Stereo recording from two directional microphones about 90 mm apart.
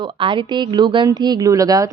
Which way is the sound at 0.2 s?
65° right (ahead or behind).